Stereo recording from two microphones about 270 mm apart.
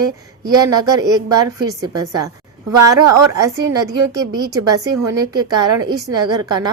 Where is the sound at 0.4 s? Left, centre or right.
Centre.